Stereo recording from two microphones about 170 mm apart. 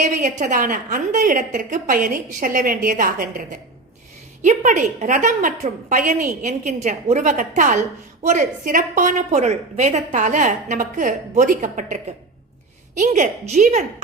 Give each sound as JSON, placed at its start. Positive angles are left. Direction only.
{"t": 0.0, "sound": "a woman's voice", "side_deg": -45}
{"t": 13.0, "sound": "a woman's voice", "side_deg": -45}